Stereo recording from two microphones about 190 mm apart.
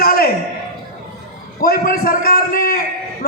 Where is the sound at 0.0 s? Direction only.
55° left (ahead or behind).